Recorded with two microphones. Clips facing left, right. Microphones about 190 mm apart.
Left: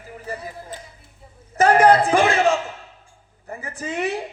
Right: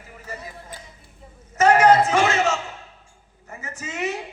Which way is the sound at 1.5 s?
35° left (ahead or behind).